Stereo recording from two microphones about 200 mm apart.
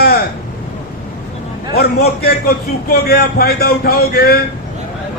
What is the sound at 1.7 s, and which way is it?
A man's voice, 50° left (ahead or behind).